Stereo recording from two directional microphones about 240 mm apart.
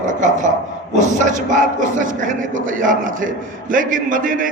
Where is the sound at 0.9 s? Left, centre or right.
Right.